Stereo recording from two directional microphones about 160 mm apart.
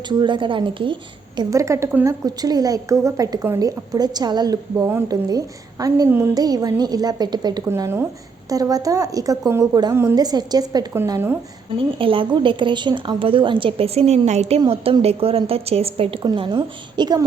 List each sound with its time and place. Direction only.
0.1 s a woman's voice: 30° right (ahead or behind)
1.4 s a woman's voice: 20° right (ahead or behind)
11.8 s a woman's voice: 35° right (ahead or behind)
14.6 s a woman's voice: 30° right (ahead or behind)